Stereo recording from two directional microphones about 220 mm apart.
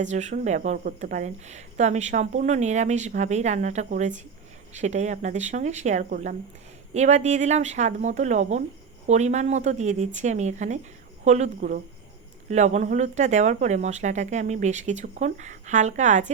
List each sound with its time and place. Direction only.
0.0 s a woman's voice: 30° right (ahead or behind)